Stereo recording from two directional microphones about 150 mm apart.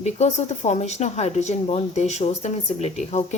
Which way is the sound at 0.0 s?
50° left (ahead or behind).